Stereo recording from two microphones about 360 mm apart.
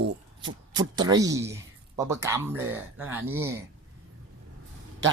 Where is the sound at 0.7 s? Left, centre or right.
Centre.